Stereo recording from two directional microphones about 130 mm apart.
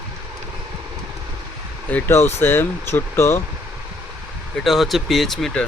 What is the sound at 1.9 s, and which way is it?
Speech, 15° left (ahead or behind).